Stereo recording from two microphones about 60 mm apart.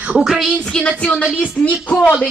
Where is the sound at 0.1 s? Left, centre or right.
Centre.